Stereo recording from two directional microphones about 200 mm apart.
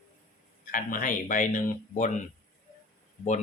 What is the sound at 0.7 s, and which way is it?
Speech, 40° left (ahead or behind).